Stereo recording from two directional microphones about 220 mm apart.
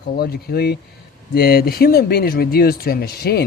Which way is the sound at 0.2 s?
45° left (ahead or behind).